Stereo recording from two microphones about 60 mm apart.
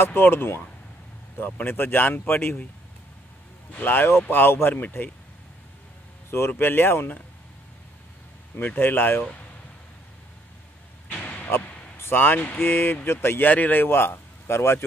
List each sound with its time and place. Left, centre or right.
0.0 s speech: left
3.7 s speech: left
6.5 s speech: left
8.5 s speech: left
11.1 s a sound: left
12.0 s speech: left
13.5 s a man's voice: left
13.8 s a man's voice: left